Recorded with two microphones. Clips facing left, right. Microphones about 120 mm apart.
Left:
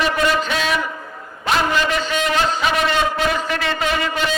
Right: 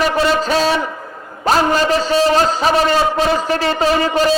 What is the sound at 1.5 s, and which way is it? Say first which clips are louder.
A man's voice: right 5 dB; 40° right (ahead or behind).